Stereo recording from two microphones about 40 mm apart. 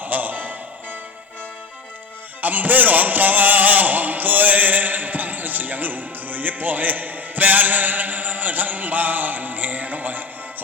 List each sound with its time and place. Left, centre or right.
0.0 s music: right
2.4 s music: right